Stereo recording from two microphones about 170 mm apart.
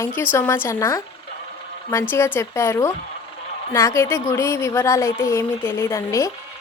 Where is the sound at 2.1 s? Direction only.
15° left (ahead or behind).